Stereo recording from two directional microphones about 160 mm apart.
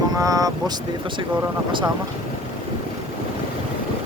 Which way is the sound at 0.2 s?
20° right (ahead or behind).